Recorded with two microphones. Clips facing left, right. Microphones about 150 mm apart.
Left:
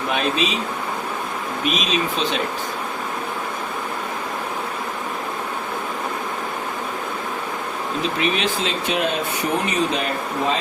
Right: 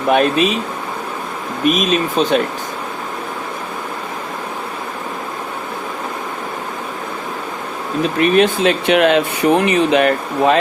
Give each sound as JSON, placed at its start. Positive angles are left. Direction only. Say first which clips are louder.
{"t": 0.1, "sound": "speech", "louder": "right 9 dB", "side_deg": -55}
{"t": 1.6, "sound": "speech", "louder": "right 8 dB", "side_deg": -50}
{"t": 8.2, "sound": "speech", "louder": "right 12 dB", "side_deg": -55}